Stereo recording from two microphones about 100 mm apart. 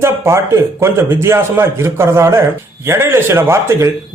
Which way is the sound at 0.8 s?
25° right (ahead or behind).